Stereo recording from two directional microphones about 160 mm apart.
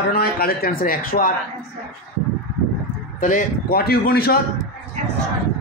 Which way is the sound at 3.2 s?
60° left (ahead or behind).